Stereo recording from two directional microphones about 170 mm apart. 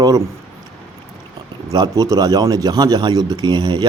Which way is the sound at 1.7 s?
20° right (ahead or behind).